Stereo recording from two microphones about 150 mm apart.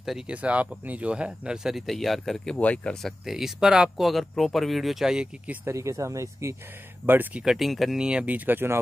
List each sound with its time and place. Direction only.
0.0 s speech: 5° right (ahead or behind)
5.7 s speech: 20° right (ahead or behind)
7.4 s speech: centre (ahead or behind)